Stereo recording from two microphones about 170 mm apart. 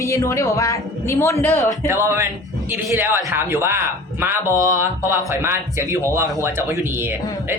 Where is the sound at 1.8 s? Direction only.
15° right (ahead or behind).